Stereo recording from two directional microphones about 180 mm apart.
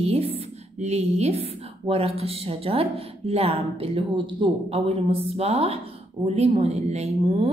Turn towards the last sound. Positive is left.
turn(degrees=-35)  # may be behind; listen again after turning